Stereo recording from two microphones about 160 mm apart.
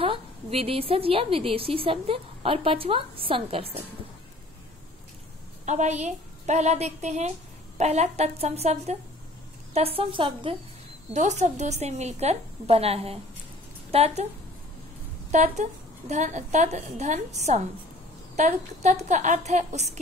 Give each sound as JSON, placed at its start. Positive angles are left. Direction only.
{"t": 0.0, "sound": "a woman's voice", "side_deg": -35}
{"t": 5.7, "sound": "a woman's voice", "side_deg": -45}
{"t": 11.1, "sound": "a woman's voice", "side_deg": -45}
{"t": 15.3, "sound": "a woman's voice", "side_deg": -45}